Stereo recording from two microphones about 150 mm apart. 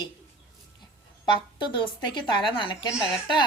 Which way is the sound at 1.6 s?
30° left (ahead or behind).